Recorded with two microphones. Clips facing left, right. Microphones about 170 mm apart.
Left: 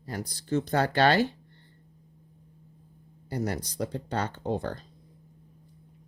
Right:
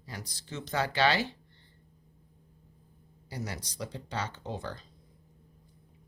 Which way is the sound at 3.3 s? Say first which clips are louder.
Left 8 dB; 50° left (ahead or behind).